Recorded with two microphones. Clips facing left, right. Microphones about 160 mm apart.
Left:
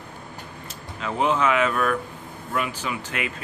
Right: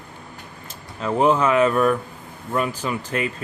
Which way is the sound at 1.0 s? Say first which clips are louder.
Right 5 dB; 40° right (ahead or behind).